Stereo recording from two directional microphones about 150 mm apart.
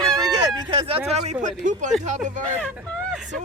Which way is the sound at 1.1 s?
50° right (ahead or behind).